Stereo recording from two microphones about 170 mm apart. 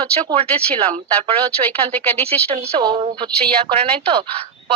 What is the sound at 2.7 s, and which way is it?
Speech, 30° right (ahead or behind).